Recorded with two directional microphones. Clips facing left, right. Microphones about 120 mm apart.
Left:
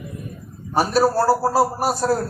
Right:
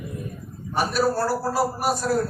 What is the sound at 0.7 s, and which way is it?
A man's voice, 30° left (ahead or behind).